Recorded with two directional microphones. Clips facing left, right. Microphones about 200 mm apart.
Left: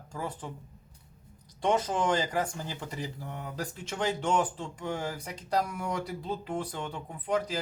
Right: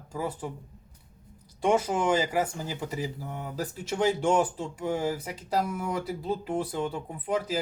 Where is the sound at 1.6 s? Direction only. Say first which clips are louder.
Right 3 dB; 10° right (ahead or behind).